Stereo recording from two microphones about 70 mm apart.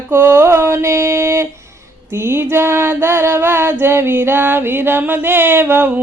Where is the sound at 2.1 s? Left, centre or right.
Right.